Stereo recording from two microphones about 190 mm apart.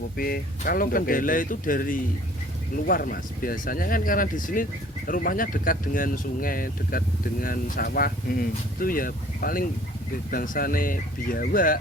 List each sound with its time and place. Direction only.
0.2 s speech: 50° left (ahead or behind)